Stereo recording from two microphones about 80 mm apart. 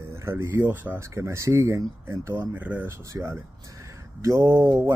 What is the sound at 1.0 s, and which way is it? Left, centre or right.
Speech, right.